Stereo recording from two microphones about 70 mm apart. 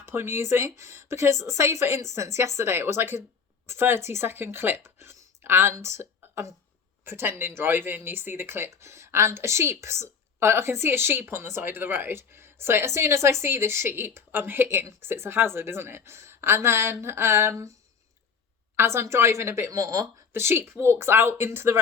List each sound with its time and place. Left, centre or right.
0.0 s speech: right
18.8 s a woman's voice: right
20.3 s speech: right